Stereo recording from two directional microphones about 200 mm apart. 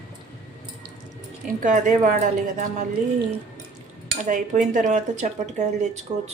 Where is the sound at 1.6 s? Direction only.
40° right (ahead or behind).